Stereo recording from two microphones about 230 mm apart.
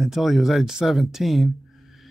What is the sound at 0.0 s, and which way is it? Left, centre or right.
Speech, centre.